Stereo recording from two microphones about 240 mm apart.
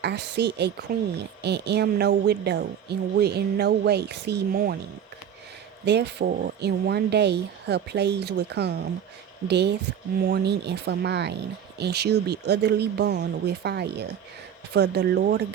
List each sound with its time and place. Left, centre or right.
0.0 s speech: right
5.8 s speech: right